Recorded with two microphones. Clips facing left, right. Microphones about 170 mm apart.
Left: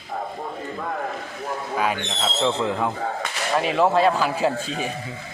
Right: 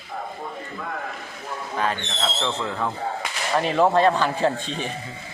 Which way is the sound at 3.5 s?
Centre (ahead or behind).